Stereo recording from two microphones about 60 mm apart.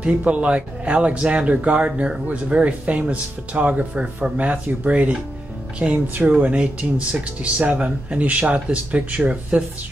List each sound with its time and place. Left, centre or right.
0.0 s speech: right